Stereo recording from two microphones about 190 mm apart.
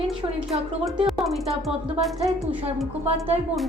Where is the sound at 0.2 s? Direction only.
20° right (ahead or behind).